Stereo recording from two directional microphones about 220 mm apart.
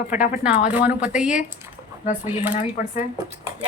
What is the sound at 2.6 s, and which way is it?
Speech, 35° left (ahead or behind).